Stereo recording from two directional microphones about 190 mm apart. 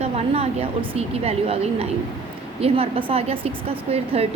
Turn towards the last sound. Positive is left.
turn(degrees=-30)  # may be behind; listen again after turning